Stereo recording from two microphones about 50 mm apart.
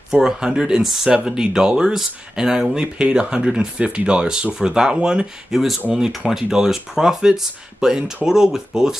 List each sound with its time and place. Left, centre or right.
0.1 s speech: centre
0.8 s speech: centre
1.1 s speech: centre